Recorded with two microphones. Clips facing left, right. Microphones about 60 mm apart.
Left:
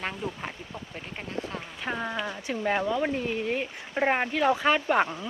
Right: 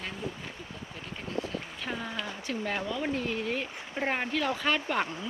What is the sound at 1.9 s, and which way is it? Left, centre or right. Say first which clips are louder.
Speech: left 5 dB; left.